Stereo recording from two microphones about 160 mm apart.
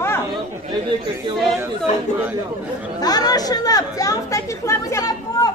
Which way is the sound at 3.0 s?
25° left (ahead or behind).